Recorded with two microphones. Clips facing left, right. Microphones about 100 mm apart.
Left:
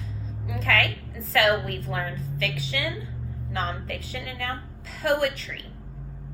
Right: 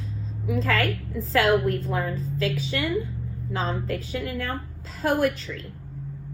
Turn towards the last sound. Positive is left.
turn(degrees=-35)  # may be behind; listen again after turning